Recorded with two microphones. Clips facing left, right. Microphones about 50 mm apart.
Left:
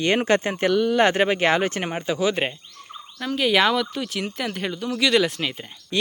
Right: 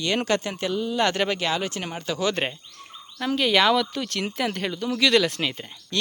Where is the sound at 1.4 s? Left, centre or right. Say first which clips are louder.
Left 6 dB; left.